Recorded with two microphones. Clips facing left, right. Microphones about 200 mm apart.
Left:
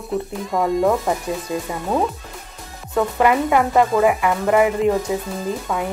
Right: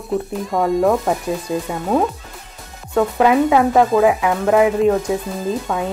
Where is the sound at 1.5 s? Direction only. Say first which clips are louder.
Right 3 dB; 20° right (ahead or behind).